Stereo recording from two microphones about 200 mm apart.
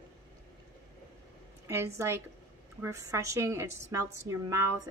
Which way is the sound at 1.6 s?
15° right (ahead or behind).